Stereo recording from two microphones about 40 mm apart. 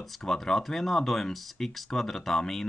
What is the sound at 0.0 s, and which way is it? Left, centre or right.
Speech, centre.